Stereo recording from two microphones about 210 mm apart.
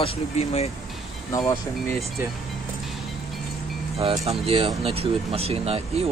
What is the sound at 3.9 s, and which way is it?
Speech, 25° right (ahead or behind).